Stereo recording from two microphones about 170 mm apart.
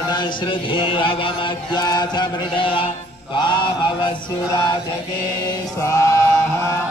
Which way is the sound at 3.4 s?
25° left (ahead or behind).